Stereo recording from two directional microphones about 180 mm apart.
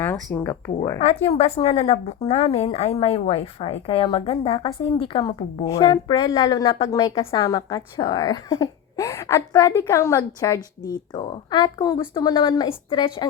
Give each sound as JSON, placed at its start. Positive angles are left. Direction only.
{"t": 0.0, "sound": "a woman's voice", "side_deg": 10}
{"t": 0.9, "sound": "a woman's voice", "side_deg": 35}